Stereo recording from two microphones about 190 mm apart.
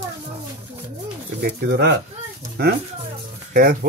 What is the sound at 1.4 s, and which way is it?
Speech, 55° right (ahead or behind).